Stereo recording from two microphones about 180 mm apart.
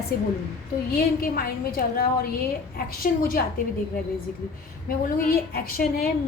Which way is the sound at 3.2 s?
50° left (ahead or behind).